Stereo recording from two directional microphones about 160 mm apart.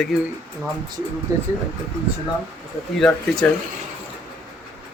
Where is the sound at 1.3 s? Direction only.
20° right (ahead or behind).